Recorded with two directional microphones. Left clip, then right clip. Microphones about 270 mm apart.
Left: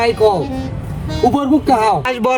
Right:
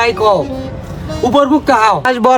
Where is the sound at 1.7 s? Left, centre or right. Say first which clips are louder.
Right 3 dB; centre.